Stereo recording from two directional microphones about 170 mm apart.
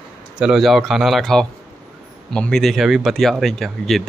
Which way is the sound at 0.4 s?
Centre (ahead or behind).